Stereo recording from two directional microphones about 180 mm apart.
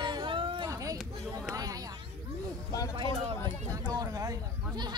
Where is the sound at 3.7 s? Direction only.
20° right (ahead or behind).